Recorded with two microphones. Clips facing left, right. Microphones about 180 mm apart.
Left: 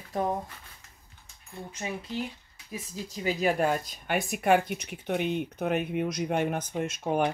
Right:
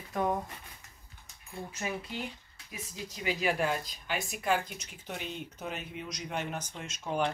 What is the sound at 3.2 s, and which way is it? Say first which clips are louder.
Speech: left 4 dB; 40° left (ahead or behind).